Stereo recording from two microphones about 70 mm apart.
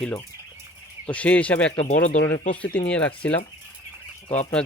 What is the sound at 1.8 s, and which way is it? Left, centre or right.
Speech, left.